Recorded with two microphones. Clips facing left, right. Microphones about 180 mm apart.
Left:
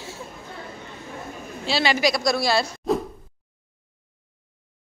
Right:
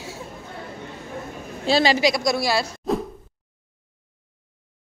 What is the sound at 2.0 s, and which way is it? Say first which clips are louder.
Speech: right 1 dB; 20° right (ahead or behind).